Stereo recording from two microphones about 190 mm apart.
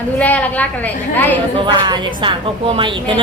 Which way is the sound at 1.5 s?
25° right (ahead or behind).